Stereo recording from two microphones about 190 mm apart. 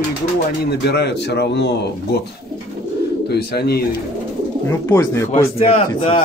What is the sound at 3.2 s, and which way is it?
Speech, 60° left (ahead or behind).